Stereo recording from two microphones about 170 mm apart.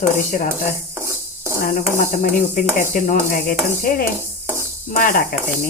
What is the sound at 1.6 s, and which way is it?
Speech, 50° left (ahead or behind).